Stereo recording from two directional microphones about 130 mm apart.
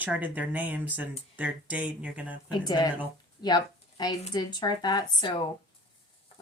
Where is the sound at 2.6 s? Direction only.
30° left (ahead or behind).